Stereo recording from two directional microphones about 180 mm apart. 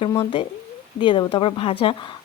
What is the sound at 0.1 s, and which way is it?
Speech, 20° left (ahead or behind).